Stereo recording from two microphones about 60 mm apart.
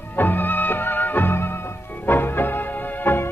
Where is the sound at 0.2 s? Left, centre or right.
Left.